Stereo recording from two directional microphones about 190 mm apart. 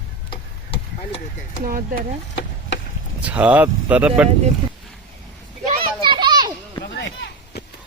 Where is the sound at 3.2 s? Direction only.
5° right (ahead or behind).